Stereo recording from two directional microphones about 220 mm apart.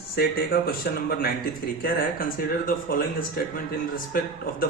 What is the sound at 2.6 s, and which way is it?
Speech, 40° left (ahead or behind).